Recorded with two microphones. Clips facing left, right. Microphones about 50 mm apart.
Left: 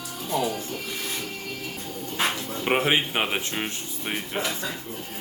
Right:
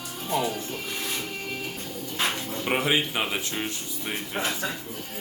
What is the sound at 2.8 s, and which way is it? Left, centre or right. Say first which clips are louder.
Speech: left 2 dB; left.